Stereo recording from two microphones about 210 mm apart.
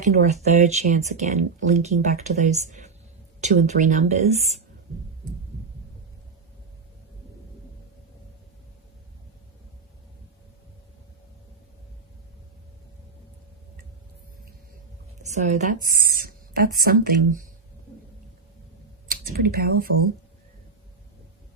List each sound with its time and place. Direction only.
0.0 s speech: 35° right (ahead or behind)
15.3 s speech: 35° right (ahead or behind)
19.0 s speech: 45° right (ahead or behind)